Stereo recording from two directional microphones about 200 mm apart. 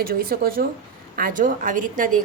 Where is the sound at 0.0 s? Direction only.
50° right (ahead or behind).